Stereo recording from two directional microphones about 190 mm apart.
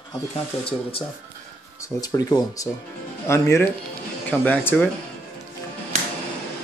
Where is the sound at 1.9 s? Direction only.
20° left (ahead or behind).